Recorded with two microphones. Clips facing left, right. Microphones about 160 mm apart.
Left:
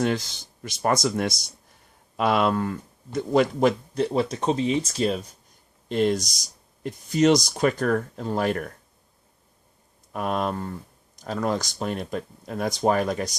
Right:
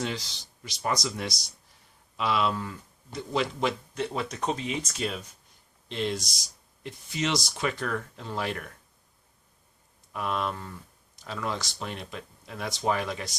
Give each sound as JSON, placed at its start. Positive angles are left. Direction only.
{"t": 0.0, "sound": "speech", "side_deg": 50}
{"t": 5.9, "sound": "speech", "side_deg": 50}
{"t": 10.1, "sound": "speech", "side_deg": 45}